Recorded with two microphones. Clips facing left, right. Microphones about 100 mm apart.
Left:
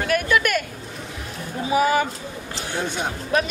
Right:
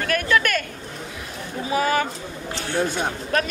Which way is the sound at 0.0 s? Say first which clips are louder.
Left 1 dB; 15° left (ahead or behind).